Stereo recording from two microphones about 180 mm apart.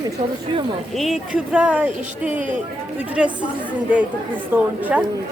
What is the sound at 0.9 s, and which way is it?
A woman's voice, centre (ahead or behind).